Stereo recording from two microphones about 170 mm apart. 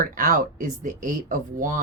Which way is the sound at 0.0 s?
55° right (ahead or behind).